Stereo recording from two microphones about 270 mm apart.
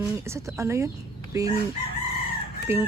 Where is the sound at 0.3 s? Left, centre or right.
Centre.